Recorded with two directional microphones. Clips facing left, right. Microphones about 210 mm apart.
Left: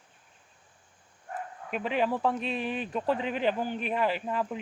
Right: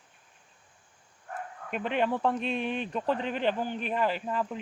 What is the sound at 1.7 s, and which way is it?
Speech, centre (ahead or behind).